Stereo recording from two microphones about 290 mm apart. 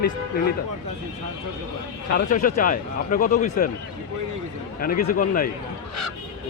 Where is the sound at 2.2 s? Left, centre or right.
Left.